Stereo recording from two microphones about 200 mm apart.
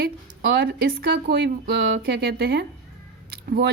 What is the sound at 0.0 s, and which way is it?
Speech, 50° right (ahead or behind).